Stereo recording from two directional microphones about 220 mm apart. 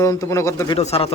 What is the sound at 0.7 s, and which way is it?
Speech, 25° left (ahead or behind).